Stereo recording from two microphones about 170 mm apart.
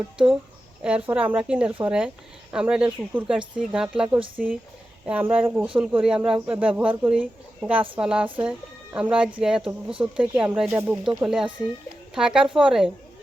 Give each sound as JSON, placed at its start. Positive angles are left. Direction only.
{"t": 0.8, "sound": "speech", "side_deg": -5}